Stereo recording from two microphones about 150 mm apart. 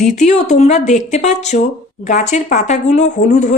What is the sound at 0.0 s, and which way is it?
Speech, 50° left (ahead or behind).